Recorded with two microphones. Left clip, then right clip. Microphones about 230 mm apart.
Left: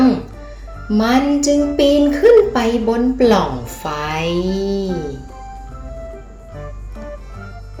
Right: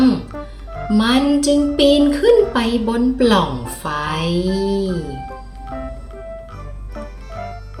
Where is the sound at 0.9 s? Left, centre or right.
Centre.